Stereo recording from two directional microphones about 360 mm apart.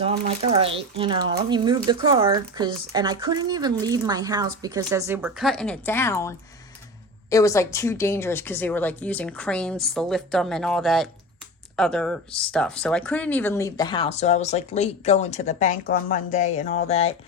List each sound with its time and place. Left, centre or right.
0.0 s a woman's voice: centre